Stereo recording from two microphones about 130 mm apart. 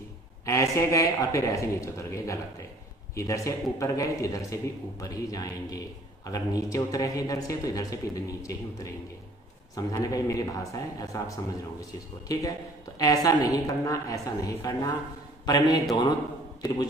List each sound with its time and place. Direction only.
0.5 s a woman's voice: 25° left (ahead or behind)
9.9 s a woman's voice: 25° left (ahead or behind)